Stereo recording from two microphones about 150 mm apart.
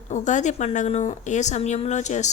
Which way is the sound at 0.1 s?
55° left (ahead or behind).